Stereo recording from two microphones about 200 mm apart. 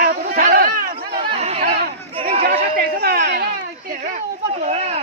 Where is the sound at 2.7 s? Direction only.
50° right (ahead or behind).